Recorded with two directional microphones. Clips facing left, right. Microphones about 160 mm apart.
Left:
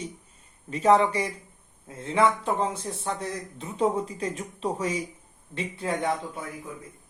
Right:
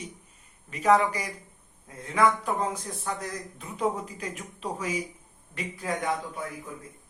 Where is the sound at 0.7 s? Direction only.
30° left (ahead or behind).